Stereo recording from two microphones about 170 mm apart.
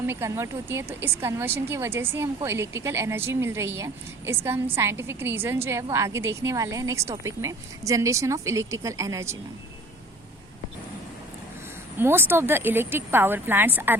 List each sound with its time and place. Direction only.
0.0 s a woman's voice: 15° right (ahead or behind)
11.9 s a woman's voice: 15° right (ahead or behind)